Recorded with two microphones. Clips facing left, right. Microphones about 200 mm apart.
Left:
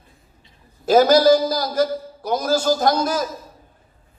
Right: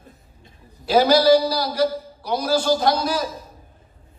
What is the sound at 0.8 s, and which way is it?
A man's voice, 45° left (ahead or behind).